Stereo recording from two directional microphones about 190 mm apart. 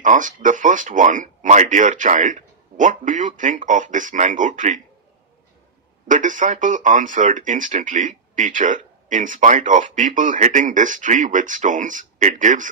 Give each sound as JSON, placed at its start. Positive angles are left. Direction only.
{"t": 0.0, "sound": "speech", "side_deg": -40}
{"t": 6.1, "sound": "speech", "side_deg": -40}